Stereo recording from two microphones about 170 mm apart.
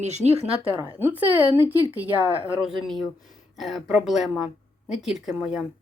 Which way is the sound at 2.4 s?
10° right (ahead or behind).